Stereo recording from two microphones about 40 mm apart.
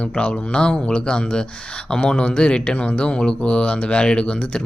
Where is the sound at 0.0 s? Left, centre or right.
Left.